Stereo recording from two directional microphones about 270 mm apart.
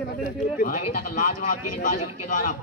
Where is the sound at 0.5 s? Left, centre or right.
Left.